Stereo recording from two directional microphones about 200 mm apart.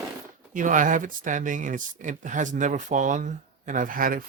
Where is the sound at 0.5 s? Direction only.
40° right (ahead or behind).